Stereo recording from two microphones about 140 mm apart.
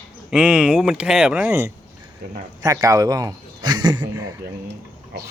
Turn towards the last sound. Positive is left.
turn(degrees=-30)  # may be behind; listen again after turning